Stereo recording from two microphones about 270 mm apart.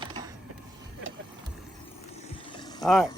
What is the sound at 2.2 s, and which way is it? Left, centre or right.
Vehicle, centre.